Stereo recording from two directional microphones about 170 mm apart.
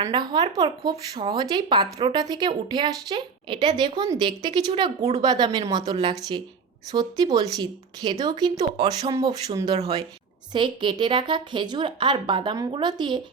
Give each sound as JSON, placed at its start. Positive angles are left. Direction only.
{"t": 0.0, "sound": "speech", "side_deg": -25}
{"t": 5.2, "sound": "speech", "side_deg": -25}